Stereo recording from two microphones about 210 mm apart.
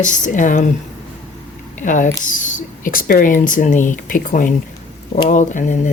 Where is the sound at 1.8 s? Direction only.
35° left (ahead or behind).